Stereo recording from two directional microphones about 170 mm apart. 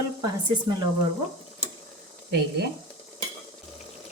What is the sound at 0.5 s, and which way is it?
Speech, 25° right (ahead or behind).